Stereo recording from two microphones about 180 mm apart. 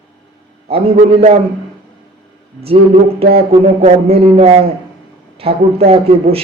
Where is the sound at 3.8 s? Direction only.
35° right (ahead or behind).